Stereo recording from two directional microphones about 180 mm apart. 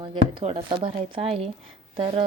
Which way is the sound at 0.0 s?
25° right (ahead or behind).